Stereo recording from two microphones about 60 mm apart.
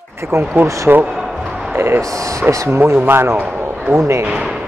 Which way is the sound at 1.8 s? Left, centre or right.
Right.